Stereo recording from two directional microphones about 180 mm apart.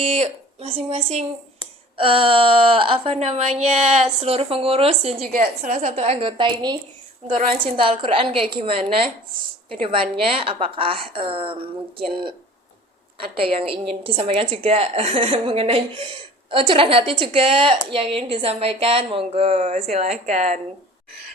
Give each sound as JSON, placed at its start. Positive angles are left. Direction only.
{"t": 0.0, "sound": "a woman's voice", "side_deg": -40}
{"t": 7.8, "sound": "a woman's voice", "side_deg": -30}
{"t": 13.3, "sound": "a woman's voice", "side_deg": -30}